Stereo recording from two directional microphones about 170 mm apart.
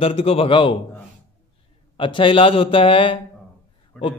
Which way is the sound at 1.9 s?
30° left (ahead or behind).